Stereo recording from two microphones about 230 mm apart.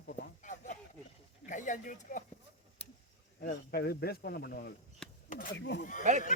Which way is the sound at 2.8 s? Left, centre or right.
Left.